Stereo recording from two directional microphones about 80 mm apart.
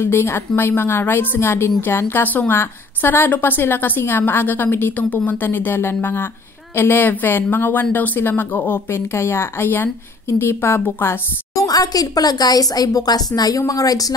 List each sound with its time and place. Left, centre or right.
0.0 s a woman's voice: left
11.5 s speech: left